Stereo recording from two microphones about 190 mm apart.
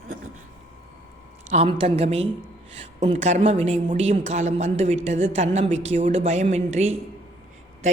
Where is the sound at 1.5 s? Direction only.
35° right (ahead or behind).